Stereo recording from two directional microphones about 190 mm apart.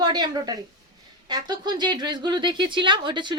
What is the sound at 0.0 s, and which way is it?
Speech, 20° right (ahead or behind).